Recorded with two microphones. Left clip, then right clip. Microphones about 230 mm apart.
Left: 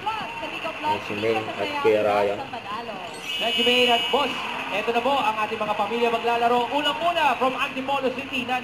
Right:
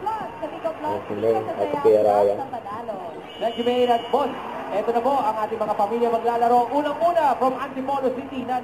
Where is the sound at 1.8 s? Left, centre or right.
Left.